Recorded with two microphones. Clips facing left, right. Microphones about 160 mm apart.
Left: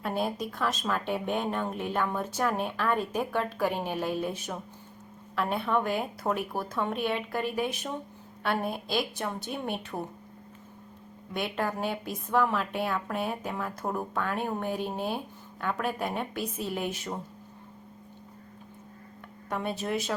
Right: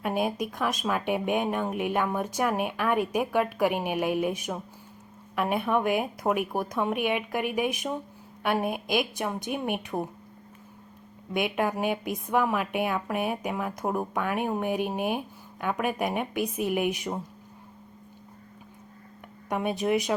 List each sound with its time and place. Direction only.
0.0 s speech: 15° right (ahead or behind)
11.3 s speech: 15° right (ahead or behind)
19.5 s speech: 15° right (ahead or behind)